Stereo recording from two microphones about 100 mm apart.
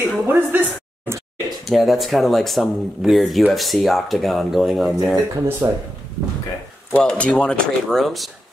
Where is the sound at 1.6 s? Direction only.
Centre (ahead or behind).